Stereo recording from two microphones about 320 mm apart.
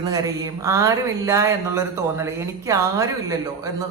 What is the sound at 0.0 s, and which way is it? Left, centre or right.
Speech, centre.